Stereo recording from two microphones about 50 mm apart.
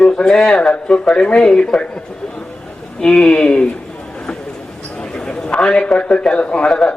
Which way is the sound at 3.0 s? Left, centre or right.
Centre.